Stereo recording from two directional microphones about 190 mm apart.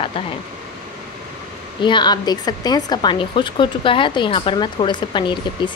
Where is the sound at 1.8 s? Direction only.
25° left (ahead or behind).